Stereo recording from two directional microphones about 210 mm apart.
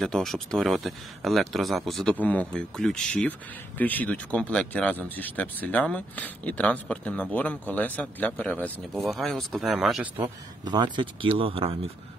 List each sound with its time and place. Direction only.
0.0 s speech: centre (ahead or behind)
10.7 s speech: 20° right (ahead or behind)